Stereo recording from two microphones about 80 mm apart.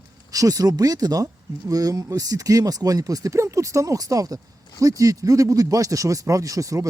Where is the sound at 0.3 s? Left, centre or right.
Right.